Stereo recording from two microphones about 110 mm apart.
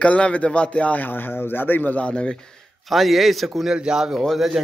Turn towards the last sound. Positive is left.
turn(degrees=0)  # may be behind; listen again after turning